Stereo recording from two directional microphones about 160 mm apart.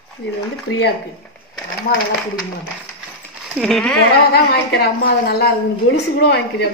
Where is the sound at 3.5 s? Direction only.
Centre (ahead or behind).